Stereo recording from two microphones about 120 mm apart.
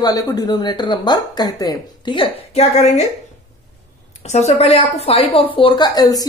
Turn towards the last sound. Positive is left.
turn(degrees=30)  # may be behind; listen again after turning